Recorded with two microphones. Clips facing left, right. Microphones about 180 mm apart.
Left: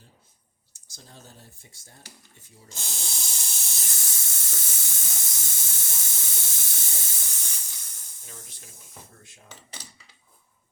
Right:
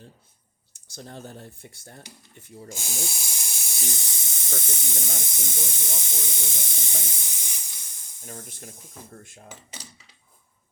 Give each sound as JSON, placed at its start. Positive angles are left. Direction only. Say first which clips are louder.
{"t": 0.7, "sound": "speech", "louder": "right 10 dB", "side_deg": -65}
{"t": 2.7, "sound": "hiss", "louder": "right 4 dB", "side_deg": -10}
{"t": 4.6, "sound": "speech", "louder": "right 9 dB", "side_deg": -20}
{"t": 8.3, "sound": "speech", "louder": "right 8 dB", "side_deg": -50}